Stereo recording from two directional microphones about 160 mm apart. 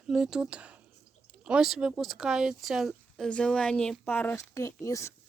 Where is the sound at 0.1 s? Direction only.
5° right (ahead or behind); by 5.1 s 20° left (ahead or behind).